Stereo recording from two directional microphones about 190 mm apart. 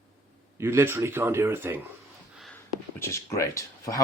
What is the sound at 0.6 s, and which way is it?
Speech, 15° right (ahead or behind).